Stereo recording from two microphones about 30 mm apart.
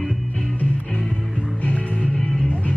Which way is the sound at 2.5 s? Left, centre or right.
Left.